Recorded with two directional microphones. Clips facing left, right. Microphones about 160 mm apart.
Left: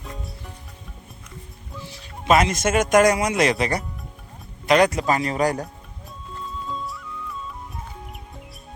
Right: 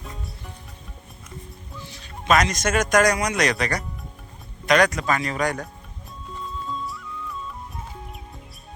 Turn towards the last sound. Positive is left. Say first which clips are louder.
# even
turn(degrees=0)  # may be behind; listen again after turning